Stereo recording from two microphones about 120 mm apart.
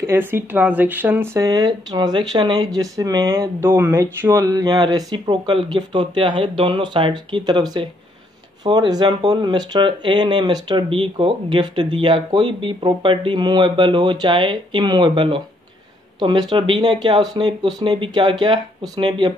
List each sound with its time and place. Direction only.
0.0 s speech: 20° right (ahead or behind); by 19.3 s 40° right (ahead or behind)